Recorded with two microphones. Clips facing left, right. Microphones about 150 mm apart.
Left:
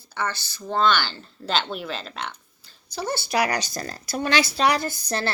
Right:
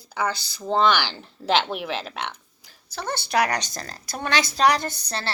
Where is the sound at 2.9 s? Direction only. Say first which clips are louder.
Left 2 dB; 5° left (ahead or behind).